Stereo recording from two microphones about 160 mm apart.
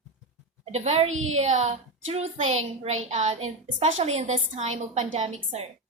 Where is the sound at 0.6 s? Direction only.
40° right (ahead or behind).